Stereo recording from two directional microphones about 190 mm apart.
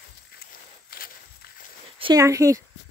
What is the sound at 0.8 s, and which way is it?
Walk, 50° left (ahead or behind).